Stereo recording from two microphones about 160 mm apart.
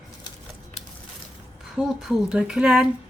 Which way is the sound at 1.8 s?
5° right (ahead or behind).